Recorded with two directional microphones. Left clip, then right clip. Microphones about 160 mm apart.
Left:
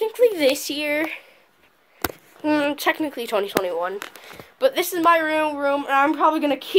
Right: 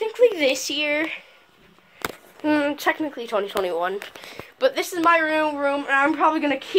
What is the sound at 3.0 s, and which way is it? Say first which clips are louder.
Speech: left 1 dB; 30° left (ahead or behind).